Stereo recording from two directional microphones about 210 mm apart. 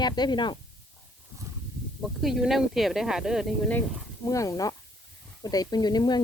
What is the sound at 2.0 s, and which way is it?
Speech, centre (ahead or behind).